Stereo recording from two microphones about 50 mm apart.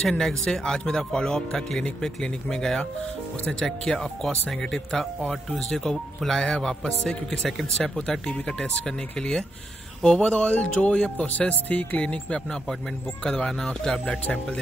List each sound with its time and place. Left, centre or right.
0.0 s speech: centre